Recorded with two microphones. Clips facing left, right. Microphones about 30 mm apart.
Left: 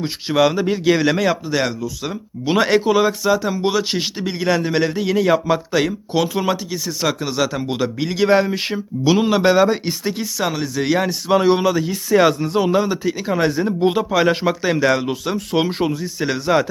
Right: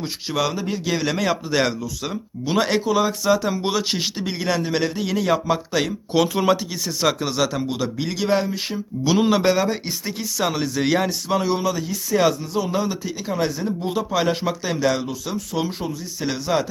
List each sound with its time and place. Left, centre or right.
0.0 s a man's voice: centre
2.4 s a man's voice: centre
3.2 s a man's voice: centre
7.7 s a man's voice: centre
8.4 s speech: left
9.0 s a man's voice: centre
10.3 s a man's voice: centre
11.4 s a man's voice: left
12.7 s a man's voice: centre
15.4 s speech: left
16.2 s a man's voice: centre